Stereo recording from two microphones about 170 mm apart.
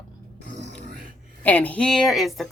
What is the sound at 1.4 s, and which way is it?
A woman's voice, 10° left (ahead or behind).